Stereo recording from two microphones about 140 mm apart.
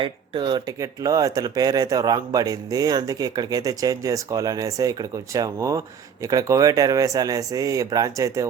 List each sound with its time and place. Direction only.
0.0 s speech: 35° right (ahead or behind)